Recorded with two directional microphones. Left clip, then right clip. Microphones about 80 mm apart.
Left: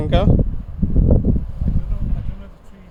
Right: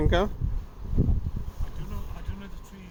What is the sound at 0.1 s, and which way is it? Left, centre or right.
Speech, left.